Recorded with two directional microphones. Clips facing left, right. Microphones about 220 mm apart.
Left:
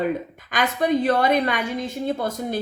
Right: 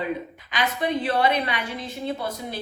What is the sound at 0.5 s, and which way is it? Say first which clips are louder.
A woman's voice: left 4 dB; 45° left (ahead or behind).